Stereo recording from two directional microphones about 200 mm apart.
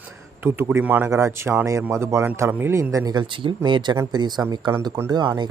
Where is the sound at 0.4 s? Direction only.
10° right (ahead or behind).